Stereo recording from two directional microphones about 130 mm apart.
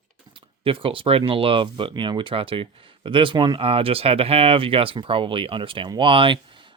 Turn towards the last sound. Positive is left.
turn(degrees=-40)  # may be behind; listen again after turning